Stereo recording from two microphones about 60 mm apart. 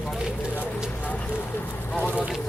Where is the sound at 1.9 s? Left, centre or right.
Left.